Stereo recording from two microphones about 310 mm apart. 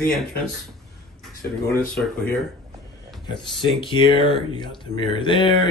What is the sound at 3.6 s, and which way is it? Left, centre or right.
Speech, centre.